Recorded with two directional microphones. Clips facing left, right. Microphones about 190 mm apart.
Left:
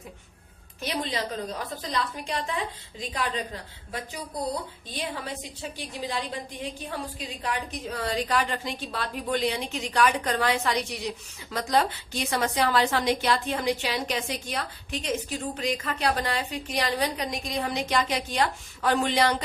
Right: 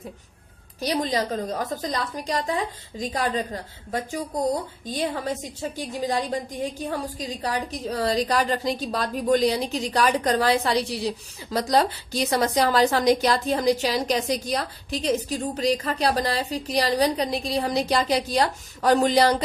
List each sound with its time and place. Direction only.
0.8 s a woman's voice: 40° right (ahead or behind)